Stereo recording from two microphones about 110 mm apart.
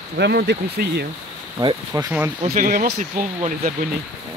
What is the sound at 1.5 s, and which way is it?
Speech, 40° right (ahead or behind).